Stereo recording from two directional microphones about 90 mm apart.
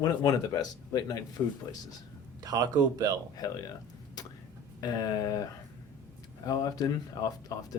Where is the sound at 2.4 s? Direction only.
45° right (ahead or behind).